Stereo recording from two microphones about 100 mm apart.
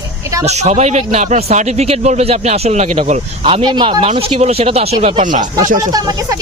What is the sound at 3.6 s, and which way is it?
Speech, 45° right (ahead or behind).